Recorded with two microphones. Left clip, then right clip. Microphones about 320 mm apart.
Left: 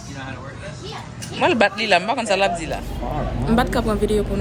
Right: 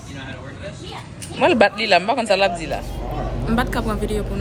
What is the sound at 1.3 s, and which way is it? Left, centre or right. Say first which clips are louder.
Speech: right 2 dB; centre.